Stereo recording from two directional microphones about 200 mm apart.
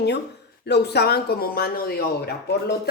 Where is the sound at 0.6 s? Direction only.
55° left (ahead or behind).